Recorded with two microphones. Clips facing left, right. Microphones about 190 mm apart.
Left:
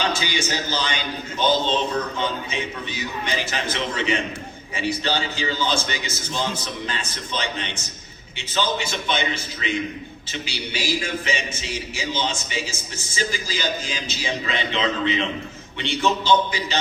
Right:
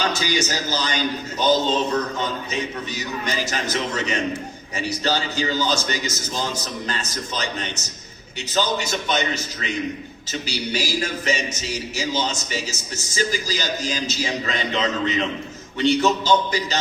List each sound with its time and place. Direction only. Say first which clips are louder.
0.0 s a man's voice: right 2 dB; 40° right (ahead or behind)